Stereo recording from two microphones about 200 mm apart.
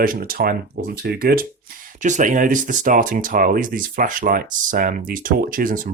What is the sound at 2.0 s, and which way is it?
Speech, 40° right (ahead or behind).